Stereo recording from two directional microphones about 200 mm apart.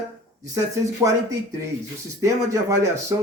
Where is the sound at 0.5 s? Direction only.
15° right (ahead or behind).